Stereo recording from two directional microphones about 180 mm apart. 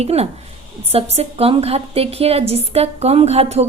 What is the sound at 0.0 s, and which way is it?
A woman's voice, 35° right (ahead or behind).